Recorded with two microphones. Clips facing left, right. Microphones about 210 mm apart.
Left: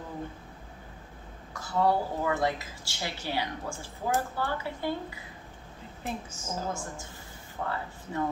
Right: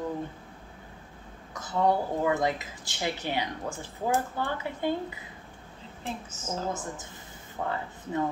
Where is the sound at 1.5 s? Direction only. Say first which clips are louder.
Right 1 dB; 20° right (ahead or behind).